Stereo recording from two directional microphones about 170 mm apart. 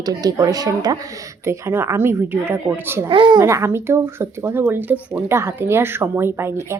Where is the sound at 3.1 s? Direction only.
30° right (ahead or behind).